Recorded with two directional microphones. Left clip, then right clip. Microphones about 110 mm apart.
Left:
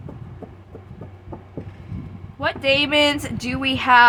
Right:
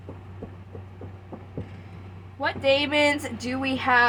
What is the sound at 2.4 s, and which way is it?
A woman's voice, 55° left (ahead or behind).